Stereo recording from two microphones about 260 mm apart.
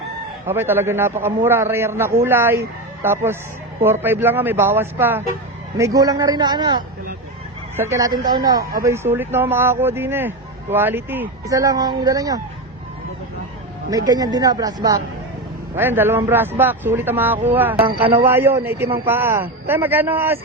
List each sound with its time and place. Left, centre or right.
0.4 s speech: centre
13.9 s speech: centre
17.8 s a man's voice: right
18.3 s speech: centre